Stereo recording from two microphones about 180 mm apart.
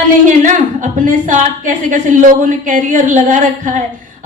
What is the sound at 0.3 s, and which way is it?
A woman's voice, 45° right (ahead or behind).